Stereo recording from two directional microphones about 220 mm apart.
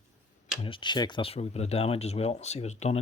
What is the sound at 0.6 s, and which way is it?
Speech, 20° left (ahead or behind).